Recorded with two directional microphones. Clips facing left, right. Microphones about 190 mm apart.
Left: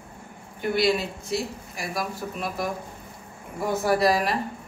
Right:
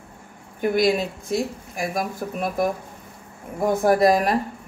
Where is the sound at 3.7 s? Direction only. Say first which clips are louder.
Right 5 dB; 50° right (ahead or behind).